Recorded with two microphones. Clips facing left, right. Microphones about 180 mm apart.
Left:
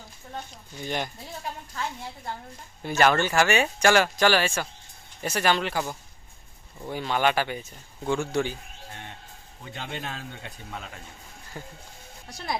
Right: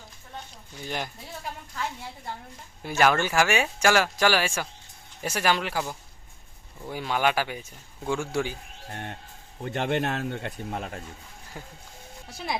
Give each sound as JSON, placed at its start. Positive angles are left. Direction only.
{"t": 0.9, "sound": "speech", "side_deg": 0}
{"t": 2.8, "sound": "speech", "side_deg": -5}
{"t": 8.9, "sound": "speech", "side_deg": -50}
{"t": 11.6, "sound": "speech", "side_deg": -5}